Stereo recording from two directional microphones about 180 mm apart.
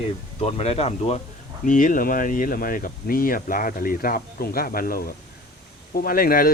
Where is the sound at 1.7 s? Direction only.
45° left (ahead or behind).